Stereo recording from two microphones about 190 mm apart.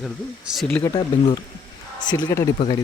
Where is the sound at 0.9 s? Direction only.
25° left (ahead or behind).